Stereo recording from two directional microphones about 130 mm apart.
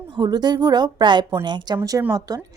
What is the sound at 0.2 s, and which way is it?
A woman's voice, 35° right (ahead or behind).